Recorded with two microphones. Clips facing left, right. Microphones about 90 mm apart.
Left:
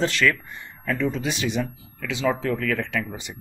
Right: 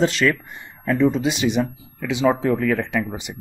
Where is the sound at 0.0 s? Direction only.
20° right (ahead or behind).